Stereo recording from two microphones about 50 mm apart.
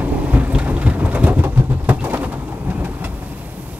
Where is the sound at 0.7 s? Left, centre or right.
Right.